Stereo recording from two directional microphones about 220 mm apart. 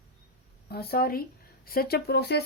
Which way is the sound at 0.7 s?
45° left (ahead or behind).